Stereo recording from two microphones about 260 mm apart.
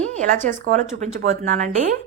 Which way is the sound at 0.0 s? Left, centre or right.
Right.